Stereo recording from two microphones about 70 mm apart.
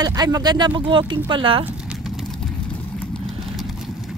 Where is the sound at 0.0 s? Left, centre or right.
Right.